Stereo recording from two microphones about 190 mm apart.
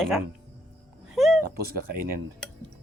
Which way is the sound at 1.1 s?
Centre (ahead or behind).